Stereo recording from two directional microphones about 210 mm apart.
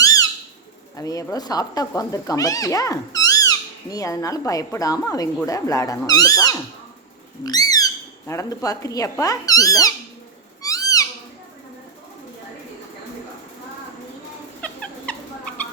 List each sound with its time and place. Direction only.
0.0 s bird: 15° left (ahead or behind)
0.9 s speech: 15° left (ahead or behind)
10.6 s cat: 15° left (ahead or behind)
14.6 s dog: 5° left (ahead or behind)